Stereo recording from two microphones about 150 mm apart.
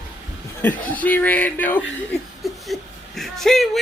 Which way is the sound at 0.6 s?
10° left (ahead or behind).